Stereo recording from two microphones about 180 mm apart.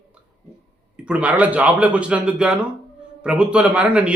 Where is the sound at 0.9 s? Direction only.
5° right (ahead or behind).